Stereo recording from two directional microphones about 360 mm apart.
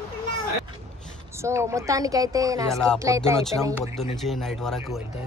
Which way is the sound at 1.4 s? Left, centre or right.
Centre.